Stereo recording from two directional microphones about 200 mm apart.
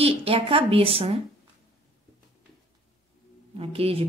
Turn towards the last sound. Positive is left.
turn(degrees=-30)  # may be behind; listen again after turning